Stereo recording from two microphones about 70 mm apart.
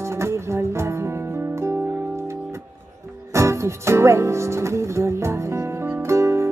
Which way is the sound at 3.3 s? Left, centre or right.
Right.